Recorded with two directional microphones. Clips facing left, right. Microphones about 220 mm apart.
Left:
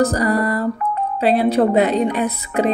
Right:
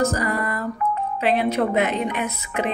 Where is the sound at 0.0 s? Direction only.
35° left (ahead or behind).